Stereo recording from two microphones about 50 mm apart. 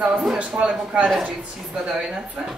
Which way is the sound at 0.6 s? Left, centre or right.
Right.